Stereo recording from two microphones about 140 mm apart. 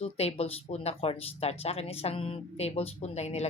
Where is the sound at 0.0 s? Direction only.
45° left (ahead or behind).